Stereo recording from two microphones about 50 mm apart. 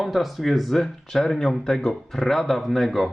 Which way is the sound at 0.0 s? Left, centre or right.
Centre.